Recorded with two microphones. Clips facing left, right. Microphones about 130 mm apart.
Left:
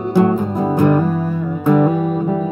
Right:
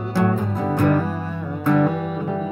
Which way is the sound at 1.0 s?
Centre (ahead or behind).